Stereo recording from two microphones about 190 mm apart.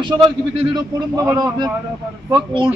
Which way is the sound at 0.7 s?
20° right (ahead or behind).